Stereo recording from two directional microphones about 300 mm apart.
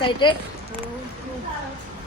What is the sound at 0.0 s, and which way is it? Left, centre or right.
Speech, centre.